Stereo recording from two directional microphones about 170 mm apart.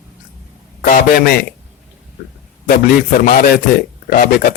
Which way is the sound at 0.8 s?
60° left (ahead or behind).